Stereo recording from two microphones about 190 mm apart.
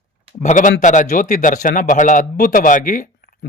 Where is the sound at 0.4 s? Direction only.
40° left (ahead or behind).